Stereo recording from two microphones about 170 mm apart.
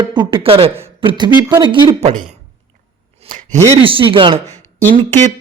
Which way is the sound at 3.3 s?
50° right (ahead or behind).